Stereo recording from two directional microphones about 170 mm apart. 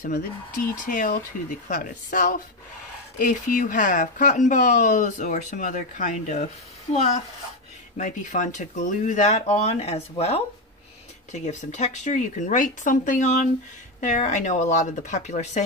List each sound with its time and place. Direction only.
0.8 s speech: 55° left (ahead or behind)
8.0 s speech: 50° left (ahead or behind)